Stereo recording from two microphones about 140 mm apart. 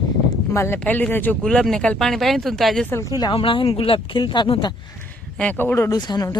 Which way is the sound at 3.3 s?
40° left (ahead or behind).